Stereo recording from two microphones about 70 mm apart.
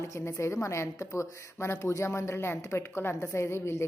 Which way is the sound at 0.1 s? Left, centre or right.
Left.